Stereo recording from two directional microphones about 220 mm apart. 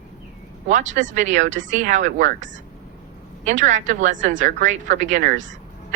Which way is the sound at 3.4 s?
35° right (ahead or behind).